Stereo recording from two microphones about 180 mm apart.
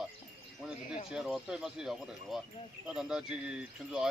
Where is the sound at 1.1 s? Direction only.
5° right (ahead or behind).